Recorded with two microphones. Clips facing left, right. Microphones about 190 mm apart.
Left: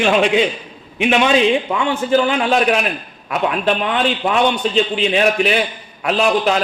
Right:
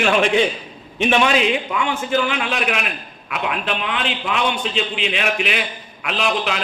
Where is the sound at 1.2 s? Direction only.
30° left (ahead or behind).